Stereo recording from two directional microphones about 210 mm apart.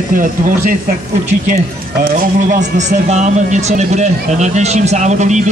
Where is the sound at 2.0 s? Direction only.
45° right (ahead or behind).